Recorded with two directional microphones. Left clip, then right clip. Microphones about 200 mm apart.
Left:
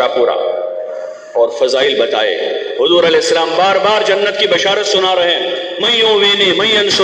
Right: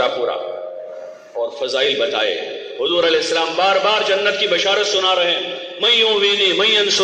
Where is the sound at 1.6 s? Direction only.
40° left (ahead or behind).